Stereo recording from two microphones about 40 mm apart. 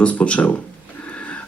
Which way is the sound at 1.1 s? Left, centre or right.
Left.